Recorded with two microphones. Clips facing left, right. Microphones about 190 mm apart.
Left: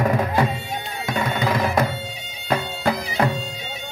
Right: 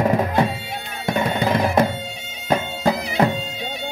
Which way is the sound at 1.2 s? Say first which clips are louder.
Right 2 dB; 25° right (ahead or behind).